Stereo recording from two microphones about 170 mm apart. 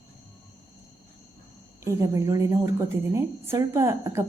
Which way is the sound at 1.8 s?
20° right (ahead or behind).